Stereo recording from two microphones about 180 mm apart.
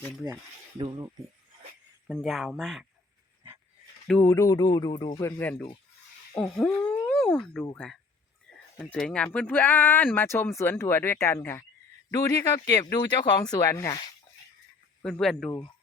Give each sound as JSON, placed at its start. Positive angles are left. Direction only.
{"t": 0.8, "sound": "speech", "side_deg": -25}
{"t": 2.0, "sound": "speech", "side_deg": 0}
{"t": 4.2, "sound": "speech", "side_deg": 15}
{"t": 5.4, "sound": "speech", "side_deg": 10}
{"t": 15.0, "sound": "speech", "side_deg": 0}
{"t": 15.4, "sound": "speech", "side_deg": 25}